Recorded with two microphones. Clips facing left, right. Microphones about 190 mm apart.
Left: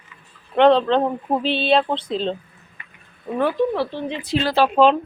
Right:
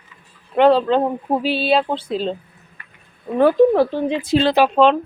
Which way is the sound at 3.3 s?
40° right (ahead or behind).